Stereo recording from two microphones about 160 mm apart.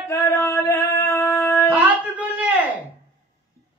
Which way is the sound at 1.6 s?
10° right (ahead or behind).